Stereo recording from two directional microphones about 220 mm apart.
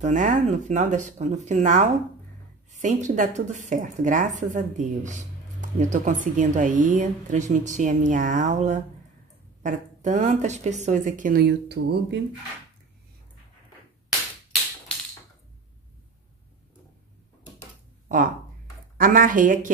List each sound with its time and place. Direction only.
0.0 s speech: 35° right (ahead or behind); by 12.2 s 50° right (ahead or behind)
18.0 s speech: 40° right (ahead or behind)